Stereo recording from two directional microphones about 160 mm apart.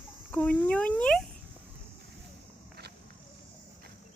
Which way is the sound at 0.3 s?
10° left (ahead or behind).